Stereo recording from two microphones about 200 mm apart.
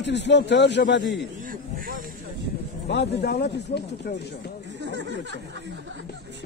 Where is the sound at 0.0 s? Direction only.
60° left (ahead or behind).